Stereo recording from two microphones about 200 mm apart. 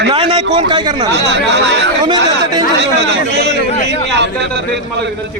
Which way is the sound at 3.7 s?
35° left (ahead or behind).